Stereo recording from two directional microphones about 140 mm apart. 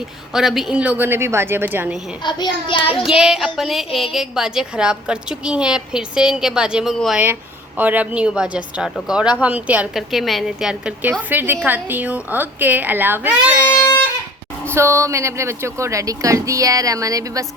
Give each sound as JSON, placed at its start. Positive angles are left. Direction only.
{"t": 0.3, "sound": "a woman's voice", "side_deg": 0}
{"t": 2.2, "sound": "a child's voice", "side_deg": 35}
{"t": 3.0, "sound": "a woman's voice", "side_deg": -5}
{"t": 7.8, "sound": "a woman's voice", "side_deg": -10}
{"t": 14.7, "sound": "a woman's voice", "side_deg": -20}